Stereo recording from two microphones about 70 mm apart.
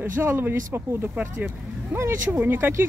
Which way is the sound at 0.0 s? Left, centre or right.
Right.